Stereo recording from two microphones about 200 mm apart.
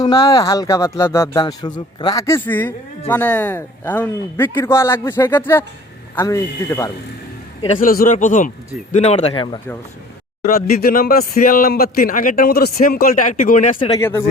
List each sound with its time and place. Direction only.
0.0 s speech: 20° left (ahead or behind)
7.8 s a man's voice: 45° left (ahead or behind); by 9.6 s 25° left (ahead or behind)
10.4 s a man's voice: 45° left (ahead or behind)
13.7 s speech: 25° left (ahead or behind)
14.0 s speech: 10° left (ahead or behind)